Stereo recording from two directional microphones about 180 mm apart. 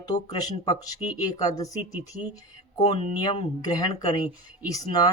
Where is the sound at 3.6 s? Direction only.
20° left (ahead or behind).